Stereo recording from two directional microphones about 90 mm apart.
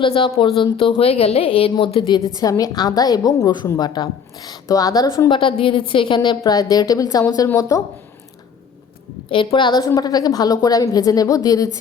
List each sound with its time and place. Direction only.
0.0 s speech: 80° left
1.7 s a woman's voice: 70° left (ahead or behind)
2.3 s speech: 40° left (ahead or behind)
5.3 s a woman's voice: 70° left (ahead or behind)
6.4 s a woman's voice: 45° left (ahead or behind)
9.3 s a woman's voice: 70° left (ahead or behind)
9.8 s a woman's voice: 45° left (ahead or behind)